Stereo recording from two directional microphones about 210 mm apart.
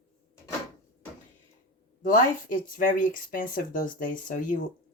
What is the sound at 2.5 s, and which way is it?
Speech, 40° left (ahead or behind).